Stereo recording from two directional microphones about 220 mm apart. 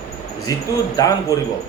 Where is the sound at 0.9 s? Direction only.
15° left (ahead or behind).